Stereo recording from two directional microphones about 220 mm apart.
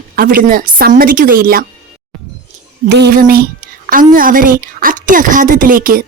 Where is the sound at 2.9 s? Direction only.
45° right (ahead or behind).